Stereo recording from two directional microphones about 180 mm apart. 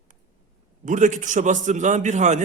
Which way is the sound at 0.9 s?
45° right (ahead or behind).